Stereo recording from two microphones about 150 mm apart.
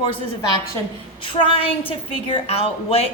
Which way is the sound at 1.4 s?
35° left (ahead or behind).